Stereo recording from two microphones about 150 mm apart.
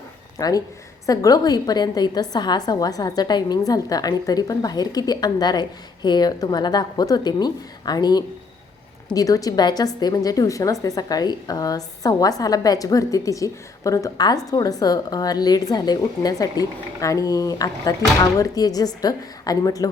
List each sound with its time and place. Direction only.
0.3 s a woman's voice: 25° left (ahead or behind)